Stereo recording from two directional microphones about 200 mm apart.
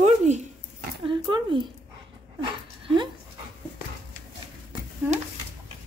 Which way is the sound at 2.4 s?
25° right (ahead or behind).